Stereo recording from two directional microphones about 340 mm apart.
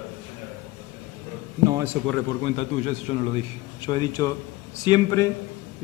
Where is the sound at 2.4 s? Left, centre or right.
Centre.